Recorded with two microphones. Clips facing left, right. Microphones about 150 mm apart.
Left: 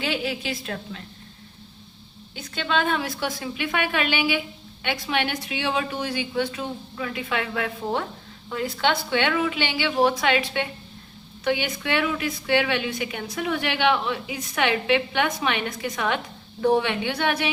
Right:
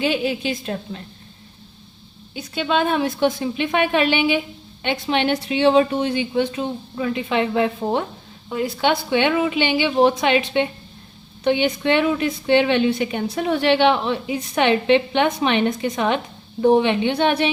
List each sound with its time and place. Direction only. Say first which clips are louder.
0.0 s a woman's voice: right 6 dB; 20° right (ahead or behind)
2.3 s a woman's voice: right 4 dB; 15° right (ahead or behind)